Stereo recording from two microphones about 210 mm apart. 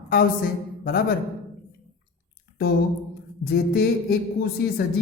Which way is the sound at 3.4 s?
45° left (ahead or behind).